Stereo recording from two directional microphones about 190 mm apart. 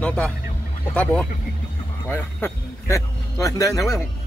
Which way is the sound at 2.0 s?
10° left (ahead or behind).